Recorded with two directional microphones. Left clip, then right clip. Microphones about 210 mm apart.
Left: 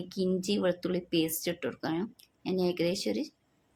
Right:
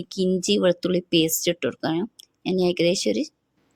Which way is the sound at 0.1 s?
40° right (ahead or behind).